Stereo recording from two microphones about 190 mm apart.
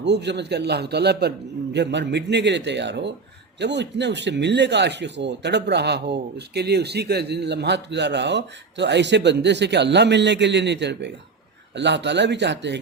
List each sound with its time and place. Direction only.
0.0 s speech: 65° right (ahead or behind)